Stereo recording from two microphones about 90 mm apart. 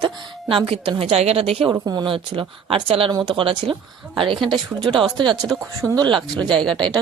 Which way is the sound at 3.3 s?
70° right (ahead or behind).